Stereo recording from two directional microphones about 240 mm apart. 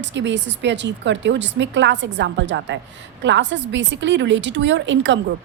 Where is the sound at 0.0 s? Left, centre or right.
Right.